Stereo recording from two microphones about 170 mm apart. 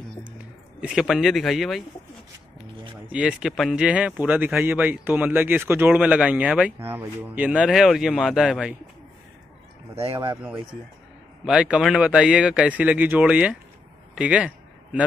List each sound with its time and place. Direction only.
0.7 s speech: 5° right (ahead or behind)
3.1 s speech: 5° right (ahead or behind)
9.9 s speech: 30° right (ahead or behind)
10.3 s speech: 10° right (ahead or behind)
14.1 s a sound: 5° right (ahead or behind)